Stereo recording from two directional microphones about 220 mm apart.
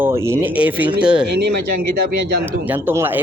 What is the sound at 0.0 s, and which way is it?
Speech, 10° right (ahead or behind).